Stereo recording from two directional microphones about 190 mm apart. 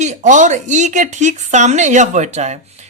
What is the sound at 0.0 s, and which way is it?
A man's voice, 40° right (ahead or behind).